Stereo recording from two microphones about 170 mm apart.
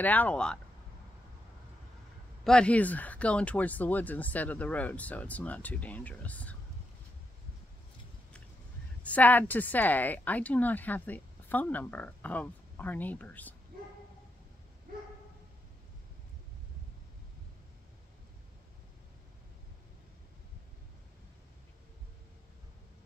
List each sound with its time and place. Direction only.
0.0 s a woman's voice: 10° left (ahead or behind)
2.4 s a woman's voice: 5° left (ahead or behind)
9.0 s a woman's voice: 10° left (ahead or behind)